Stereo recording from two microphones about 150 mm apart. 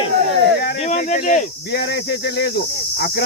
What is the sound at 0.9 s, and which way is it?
Speech, 55° left (ahead or behind).